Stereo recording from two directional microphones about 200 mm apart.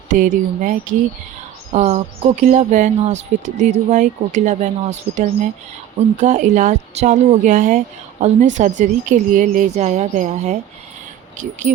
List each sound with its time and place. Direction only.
0.1 s a woman's voice: 40° right (ahead or behind)